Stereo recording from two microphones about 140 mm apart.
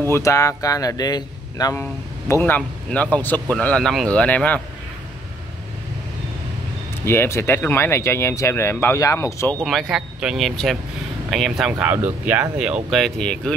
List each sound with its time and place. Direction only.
0.1 s speech: 20° left (ahead or behind)
7.1 s speech: 20° left (ahead or behind)
9.6 s speech: centre (ahead or behind)
11.9 s speech: 15° right (ahead or behind)
12.9 s speech: 5° left (ahead or behind)